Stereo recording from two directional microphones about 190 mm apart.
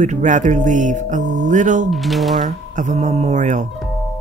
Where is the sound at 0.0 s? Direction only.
40° right (ahead or behind).